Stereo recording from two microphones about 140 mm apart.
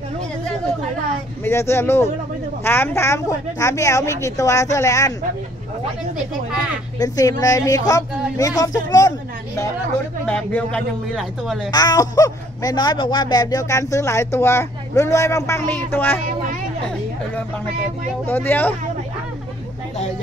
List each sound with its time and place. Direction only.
1.4 s speech: 20° left (ahead or behind)
7.0 s speech: 25° left (ahead or behind)
10.2 s speech: 10° left (ahead or behind)
11.7 s speech: 30° left (ahead or behind)
18.2 s speech: 15° left (ahead or behind)